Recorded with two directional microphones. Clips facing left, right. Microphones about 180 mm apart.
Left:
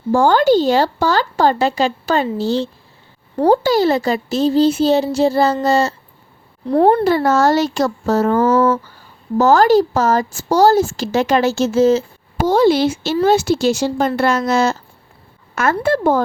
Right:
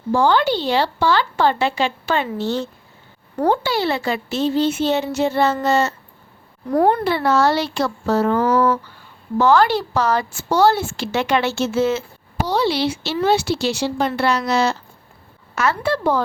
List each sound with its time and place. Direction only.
0.1 s a woman's voice: 45° left (ahead or behind)
7.0 s a woman's voice: 45° left (ahead or behind)